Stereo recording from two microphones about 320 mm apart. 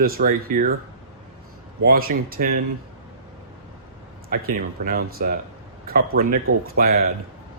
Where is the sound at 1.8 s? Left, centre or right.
Right.